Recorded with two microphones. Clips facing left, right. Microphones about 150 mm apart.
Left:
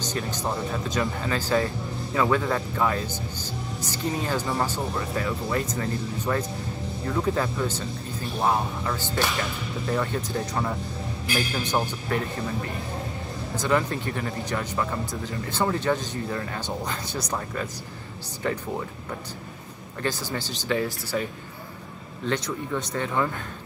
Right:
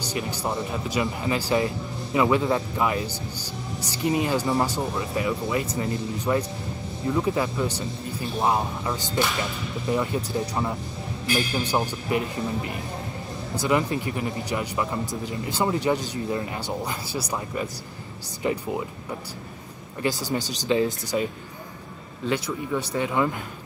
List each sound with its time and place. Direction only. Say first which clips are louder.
0.0 s speech: even; 10° right (ahead or behind)
20.0 s speech: right 3 dB; 15° right (ahead or behind)
22.3 s speech: right 2 dB; 10° right (ahead or behind)